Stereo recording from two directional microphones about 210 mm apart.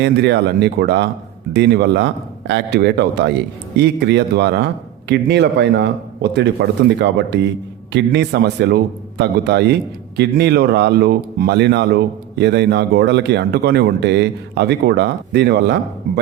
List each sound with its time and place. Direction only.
0.0 s a man's voice: 55° right (ahead or behind)